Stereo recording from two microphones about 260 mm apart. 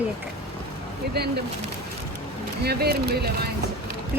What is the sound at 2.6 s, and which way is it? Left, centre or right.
Speech, right.